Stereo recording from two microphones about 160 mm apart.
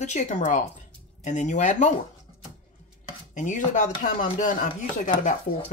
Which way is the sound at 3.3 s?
50° left (ahead or behind).